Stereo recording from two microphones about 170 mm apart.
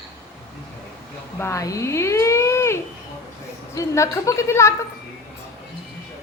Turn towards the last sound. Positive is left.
turn(degrees=15)  # may be behind; listen again after turning